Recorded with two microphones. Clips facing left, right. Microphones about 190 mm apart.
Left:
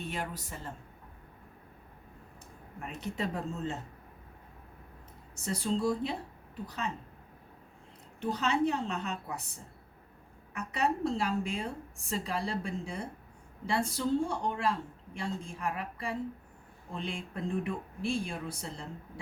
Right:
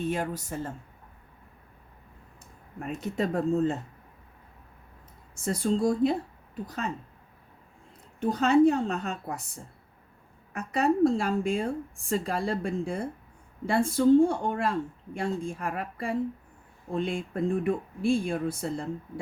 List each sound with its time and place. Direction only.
0.0 s a woman's voice: 45° right (ahead or behind)
2.8 s a woman's voice: 45° right (ahead or behind)
5.3 s a woman's voice: 50° right (ahead or behind)
8.2 s a woman's voice: 50° right (ahead or behind)
10.5 s a woman's voice: 45° right (ahead or behind)